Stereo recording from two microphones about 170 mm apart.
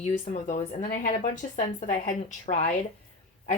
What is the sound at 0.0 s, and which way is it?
Speech, 45° left (ahead or behind).